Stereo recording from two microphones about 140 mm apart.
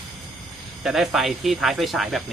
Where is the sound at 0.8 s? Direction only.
Centre (ahead or behind).